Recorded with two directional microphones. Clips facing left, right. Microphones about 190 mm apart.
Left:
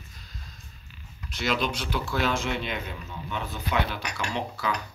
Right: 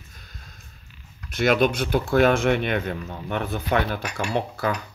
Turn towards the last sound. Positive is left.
turn(degrees=-50)  # may be behind; listen again after turning